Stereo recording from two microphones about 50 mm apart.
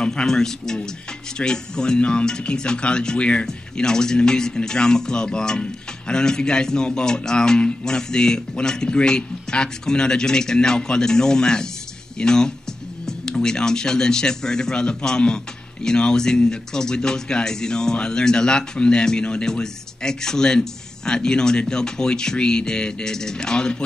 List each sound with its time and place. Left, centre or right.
0.0 s a man's voice: centre